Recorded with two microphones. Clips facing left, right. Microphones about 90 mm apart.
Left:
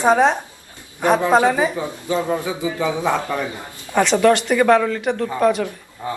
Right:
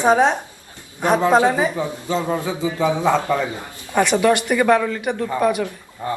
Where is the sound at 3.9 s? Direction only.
5° right (ahead or behind).